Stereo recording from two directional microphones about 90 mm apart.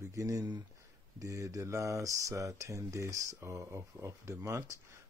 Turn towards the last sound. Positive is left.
turn(degrees=-30)  # may be behind; listen again after turning